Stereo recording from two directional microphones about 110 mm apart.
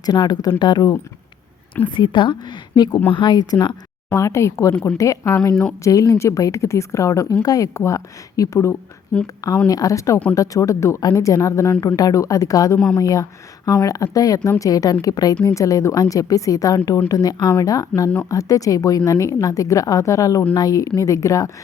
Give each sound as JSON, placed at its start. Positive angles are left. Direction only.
{"t": 0.0, "sound": "a woman's voice", "side_deg": 40}
{"t": 4.1, "sound": "a woman's voice", "side_deg": 25}
{"t": 4.7, "sound": "speech", "side_deg": 10}
{"t": 4.9, "sound": "a woman's voice", "side_deg": 30}